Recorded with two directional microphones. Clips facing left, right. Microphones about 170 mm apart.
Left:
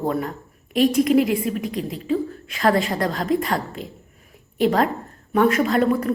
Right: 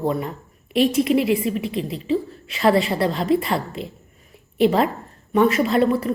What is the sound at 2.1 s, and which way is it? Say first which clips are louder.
A woman's voice: even; 5° right (ahead or behind).